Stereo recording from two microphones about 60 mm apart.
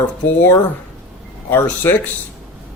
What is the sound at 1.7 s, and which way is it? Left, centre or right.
Speech, left.